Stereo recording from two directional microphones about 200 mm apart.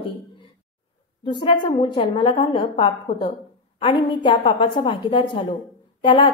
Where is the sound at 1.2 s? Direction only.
25° left (ahead or behind).